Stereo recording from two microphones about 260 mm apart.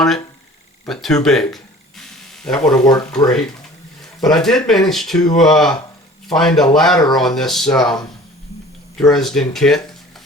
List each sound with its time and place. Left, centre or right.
0.9 s mechanisms: centre
2.6 s speech: centre